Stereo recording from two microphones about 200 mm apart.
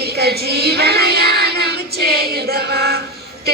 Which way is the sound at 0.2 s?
50° right (ahead or behind).